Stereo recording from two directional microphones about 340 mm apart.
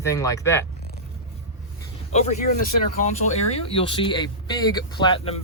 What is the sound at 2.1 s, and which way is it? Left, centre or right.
Speech, left.